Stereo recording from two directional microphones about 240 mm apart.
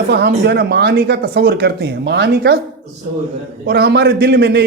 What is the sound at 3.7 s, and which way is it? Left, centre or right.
Speech, right.